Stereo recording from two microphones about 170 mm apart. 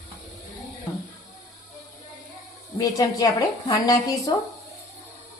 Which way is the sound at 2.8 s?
20° left (ahead or behind).